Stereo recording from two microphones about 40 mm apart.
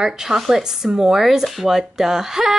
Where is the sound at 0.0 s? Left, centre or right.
Centre.